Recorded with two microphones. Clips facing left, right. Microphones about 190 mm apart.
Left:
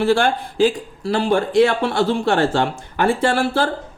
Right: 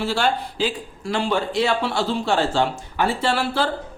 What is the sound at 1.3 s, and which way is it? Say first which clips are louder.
Speech: left 7 dB; 55° left (ahead or behind).